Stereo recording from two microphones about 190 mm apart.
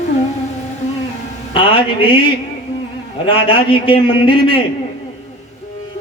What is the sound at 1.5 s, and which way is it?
Speech, 25° left (ahead or behind).